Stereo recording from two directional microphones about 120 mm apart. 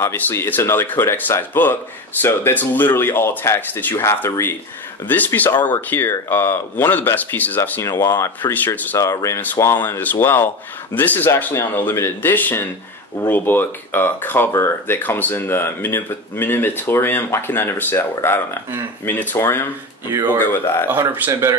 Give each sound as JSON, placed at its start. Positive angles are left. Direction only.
{"t": 0.0, "sound": "speech", "side_deg": 20}
{"t": 20.9, "sound": "speech", "side_deg": -20}